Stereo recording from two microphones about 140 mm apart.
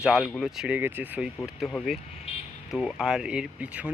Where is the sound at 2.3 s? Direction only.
45° left (ahead or behind).